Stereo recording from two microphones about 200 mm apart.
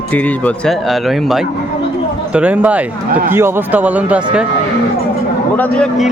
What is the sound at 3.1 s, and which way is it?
Speech, 45° right (ahead or behind).